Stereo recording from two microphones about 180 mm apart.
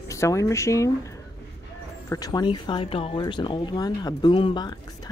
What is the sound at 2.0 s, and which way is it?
Speech, 20° left (ahead or behind).